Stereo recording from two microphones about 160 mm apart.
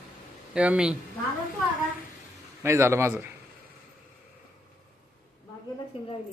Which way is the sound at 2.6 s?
15° right (ahead or behind).